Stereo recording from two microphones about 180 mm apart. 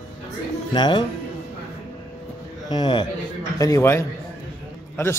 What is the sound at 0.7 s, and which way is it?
Speech, 25° left (ahead or behind).